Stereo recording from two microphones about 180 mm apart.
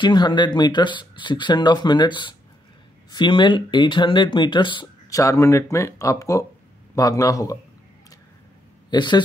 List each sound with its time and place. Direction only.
0.0 s speech: 25° left (ahead or behind)
8.9 s speech: 25° left (ahead or behind)